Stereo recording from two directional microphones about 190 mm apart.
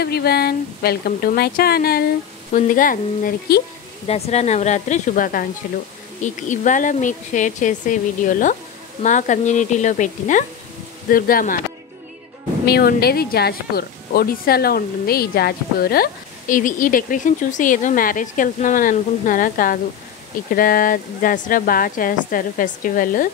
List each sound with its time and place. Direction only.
0.0 s speech: 55° left (ahead or behind)
4.1 s speech: 35° left (ahead or behind)
12.6 s speech: 55° left (ahead or behind)